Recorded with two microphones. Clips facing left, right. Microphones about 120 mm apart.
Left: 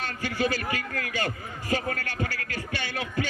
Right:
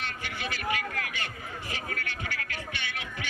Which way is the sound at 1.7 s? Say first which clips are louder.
Left 10 dB; 45° left (ahead or behind).